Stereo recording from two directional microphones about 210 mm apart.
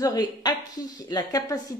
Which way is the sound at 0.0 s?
20° left (ahead or behind).